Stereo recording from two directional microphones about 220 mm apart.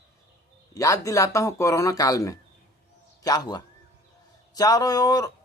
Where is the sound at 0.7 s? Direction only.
15° left (ahead or behind).